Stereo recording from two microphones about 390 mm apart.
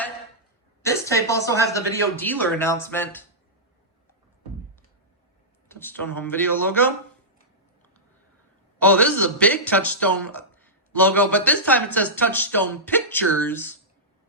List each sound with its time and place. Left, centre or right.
0.8 s a woman's voice: centre
5.6 s a man's voice: centre
8.8 s a man's voice: centre